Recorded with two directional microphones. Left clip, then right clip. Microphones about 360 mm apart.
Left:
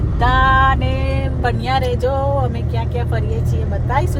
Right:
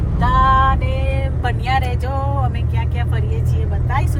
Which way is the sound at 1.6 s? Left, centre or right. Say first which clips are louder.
Even; centre.